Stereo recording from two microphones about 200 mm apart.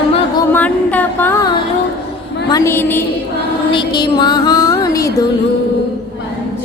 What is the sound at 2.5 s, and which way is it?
Speech, 15° left (ahead or behind).